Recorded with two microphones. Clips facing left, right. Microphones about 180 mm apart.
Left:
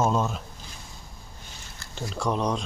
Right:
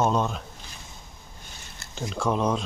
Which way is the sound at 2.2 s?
Centre (ahead or behind).